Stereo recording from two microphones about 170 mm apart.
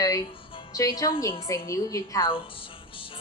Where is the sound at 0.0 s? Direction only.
20° left (ahead or behind).